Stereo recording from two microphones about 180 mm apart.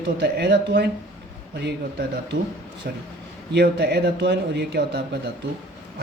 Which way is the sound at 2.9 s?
55° right (ahead or behind).